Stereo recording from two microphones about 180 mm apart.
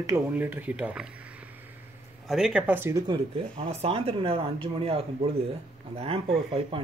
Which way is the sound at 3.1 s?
30° right (ahead or behind).